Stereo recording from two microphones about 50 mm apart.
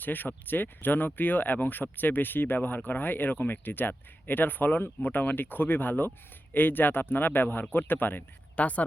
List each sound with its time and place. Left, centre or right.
0.0 s speech: left